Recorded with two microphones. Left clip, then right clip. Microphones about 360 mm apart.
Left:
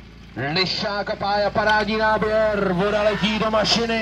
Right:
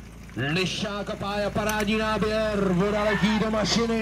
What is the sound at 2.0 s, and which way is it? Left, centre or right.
Speech, left.